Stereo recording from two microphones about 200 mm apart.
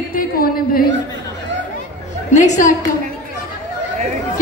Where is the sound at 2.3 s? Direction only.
35° left (ahead or behind).